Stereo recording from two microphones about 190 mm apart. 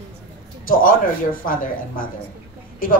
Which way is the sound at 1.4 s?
45° left (ahead or behind).